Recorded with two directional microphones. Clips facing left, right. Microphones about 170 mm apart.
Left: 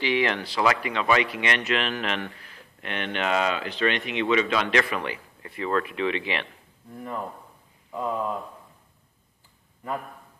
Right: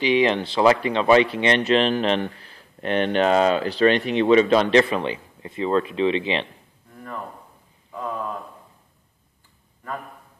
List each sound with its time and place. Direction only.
0.0 s speech: 20° right (ahead or behind)
7.9 s speech: 15° left (ahead or behind)